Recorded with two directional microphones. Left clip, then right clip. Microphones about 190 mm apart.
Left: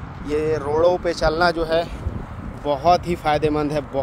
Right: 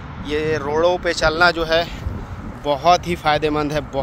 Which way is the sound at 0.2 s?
5° left (ahead or behind).